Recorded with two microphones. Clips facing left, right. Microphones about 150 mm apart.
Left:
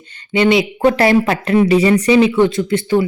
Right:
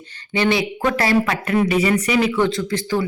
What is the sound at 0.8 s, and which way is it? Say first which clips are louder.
Speech: left 7 dB; 30° left (ahead or behind).